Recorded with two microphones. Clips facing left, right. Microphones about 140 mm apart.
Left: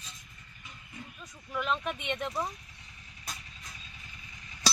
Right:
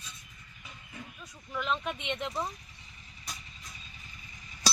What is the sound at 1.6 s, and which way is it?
Speech, centre (ahead or behind).